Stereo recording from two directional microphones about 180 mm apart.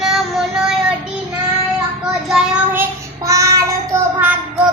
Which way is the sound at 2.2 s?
5° right (ahead or behind).